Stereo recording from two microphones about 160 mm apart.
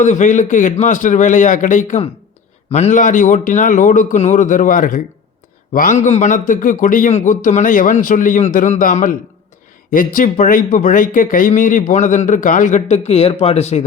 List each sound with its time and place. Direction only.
0.0 s a man's voice: 50° left (ahead or behind)